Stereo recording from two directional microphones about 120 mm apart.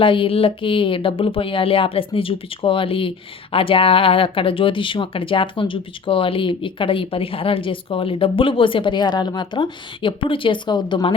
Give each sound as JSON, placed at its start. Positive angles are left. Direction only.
{"t": 0.0, "sound": "speech", "side_deg": 45}